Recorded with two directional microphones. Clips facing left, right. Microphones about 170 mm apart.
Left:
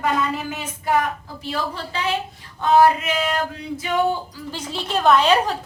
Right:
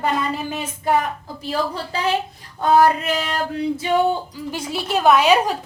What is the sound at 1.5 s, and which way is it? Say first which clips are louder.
Speech: right 3 dB; 40° right (ahead or behind).